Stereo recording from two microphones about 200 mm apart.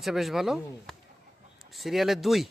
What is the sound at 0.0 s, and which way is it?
Speech, centre (ahead or behind).